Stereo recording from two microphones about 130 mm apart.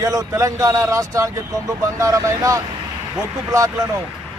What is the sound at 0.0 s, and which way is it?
Speech, 25° right (ahead or behind).